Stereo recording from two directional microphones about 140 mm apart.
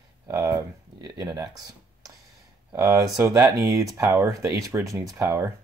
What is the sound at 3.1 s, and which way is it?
Speech, 25° right (ahead or behind).